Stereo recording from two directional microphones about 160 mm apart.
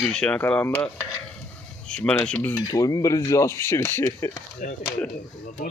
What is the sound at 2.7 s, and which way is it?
Speech, 20° left (ahead or behind).